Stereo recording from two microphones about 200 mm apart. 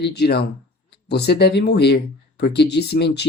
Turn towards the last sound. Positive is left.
turn(degrees=55)  # may be behind; listen again after turning